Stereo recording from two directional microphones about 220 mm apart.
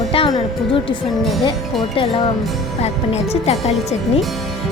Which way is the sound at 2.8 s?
30° left (ahead or behind).